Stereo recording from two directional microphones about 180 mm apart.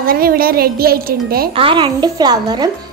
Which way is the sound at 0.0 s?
55° right (ahead or behind).